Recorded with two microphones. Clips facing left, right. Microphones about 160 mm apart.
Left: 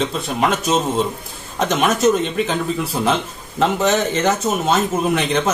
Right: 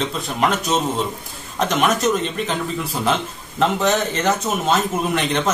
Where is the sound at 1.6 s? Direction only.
Centre (ahead or behind).